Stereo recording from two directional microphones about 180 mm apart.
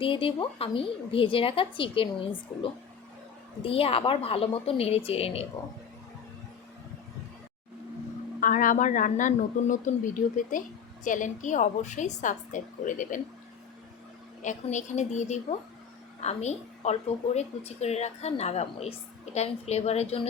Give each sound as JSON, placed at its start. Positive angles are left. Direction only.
{"t": 0.0, "sound": "a woman's voice", "side_deg": 30}
{"t": 3.6, "sound": "speech", "side_deg": 30}
{"t": 8.4, "sound": "speech", "side_deg": 50}
{"t": 14.4, "sound": "speech", "side_deg": 40}